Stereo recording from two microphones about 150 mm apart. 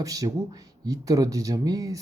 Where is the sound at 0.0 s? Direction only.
25° right (ahead or behind).